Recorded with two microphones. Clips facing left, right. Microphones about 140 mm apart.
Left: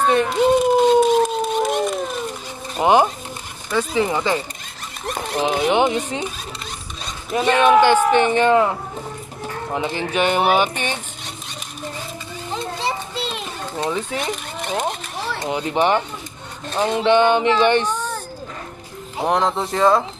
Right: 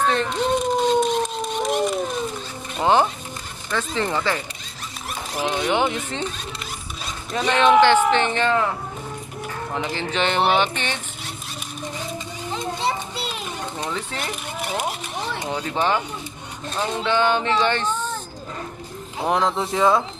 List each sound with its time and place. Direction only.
0.0 s dog: 10° left (ahead or behind)
2.8 s speech: 15° left (ahead or behind)
5.9 s speech: 15° left (ahead or behind)
9.8 s speech: 15° left (ahead or behind)
12.8 s children playing: 5° right (ahead or behind)
13.7 s speech: 20° left (ahead or behind)
14.3 s speech: 5° right (ahead or behind)
15.4 s speech: 15° left (ahead or behind)
19.2 s speech: centre (ahead or behind)